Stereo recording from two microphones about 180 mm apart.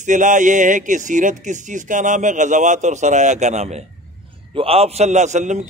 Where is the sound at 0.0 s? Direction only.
45° right (ahead or behind).